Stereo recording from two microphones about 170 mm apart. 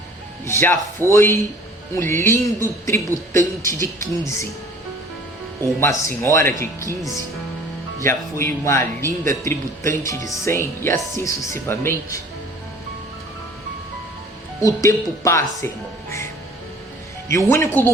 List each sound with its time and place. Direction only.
0.4 s a man's voice: 15° left (ahead or behind)
5.8 s a man's voice: 15° left (ahead or behind)
9.8 s speech: 50° right (ahead or behind)
10.4 s a man's voice: 15° left (ahead or behind)
14.6 s a man's voice: 20° left (ahead or behind)
17.2 s a man's voice: 15° left (ahead or behind)